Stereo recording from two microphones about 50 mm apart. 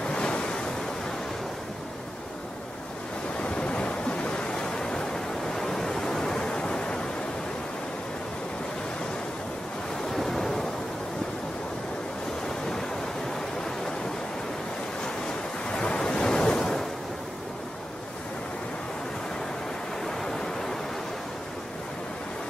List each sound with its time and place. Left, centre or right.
0.0 s waves: centre
3.3 s waves: left
10.1 s waves: centre
15.7 s waves: centre
20.0 s a sound: centre